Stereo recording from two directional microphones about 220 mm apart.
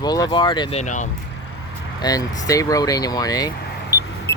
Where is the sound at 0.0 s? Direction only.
20° left (ahead or behind).